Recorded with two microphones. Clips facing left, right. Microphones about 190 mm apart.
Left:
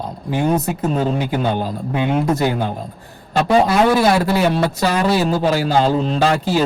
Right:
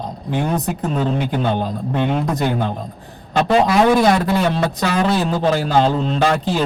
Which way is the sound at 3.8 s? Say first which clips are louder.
Even; 5° left (ahead or behind).